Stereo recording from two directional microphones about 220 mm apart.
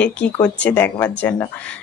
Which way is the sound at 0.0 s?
5° left (ahead or behind).